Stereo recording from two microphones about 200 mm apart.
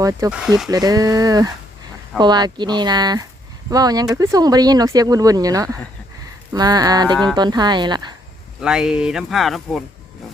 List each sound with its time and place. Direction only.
0.0 s speech: 15° right (ahead or behind)
0.3 s speech: 5° right (ahead or behind)
0.7 s speech: 20° right (ahead or behind)
8.6 s speech: 5° right (ahead or behind)